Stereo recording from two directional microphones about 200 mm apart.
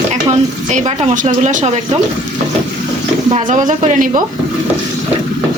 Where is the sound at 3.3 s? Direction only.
40° right (ahead or behind).